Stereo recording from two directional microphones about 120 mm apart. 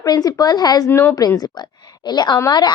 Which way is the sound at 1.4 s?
35° left (ahead or behind).